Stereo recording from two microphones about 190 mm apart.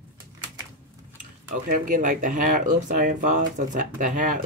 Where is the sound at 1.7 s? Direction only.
45° right (ahead or behind).